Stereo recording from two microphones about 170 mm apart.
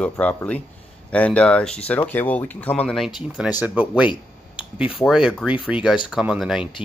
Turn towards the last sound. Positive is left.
turn(degrees=-5)  # may be behind; listen again after turning